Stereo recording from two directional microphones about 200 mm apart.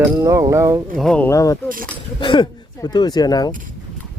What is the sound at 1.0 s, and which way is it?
Speech, 5° left (ahead or behind).